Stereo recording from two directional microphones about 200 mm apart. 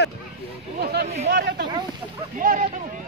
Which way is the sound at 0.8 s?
55° right (ahead or behind).